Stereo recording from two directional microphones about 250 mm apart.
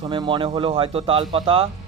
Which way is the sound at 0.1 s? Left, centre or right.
Centre.